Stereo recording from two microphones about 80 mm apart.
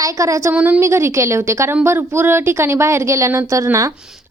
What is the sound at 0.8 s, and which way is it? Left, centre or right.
Speech, right.